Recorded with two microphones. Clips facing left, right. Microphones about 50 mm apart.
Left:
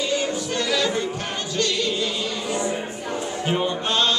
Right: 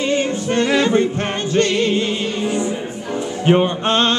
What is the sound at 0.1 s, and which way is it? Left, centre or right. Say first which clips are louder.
Music: right 6 dB; right.